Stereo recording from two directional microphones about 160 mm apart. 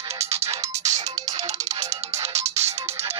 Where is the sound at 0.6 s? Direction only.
45° right (ahead or behind).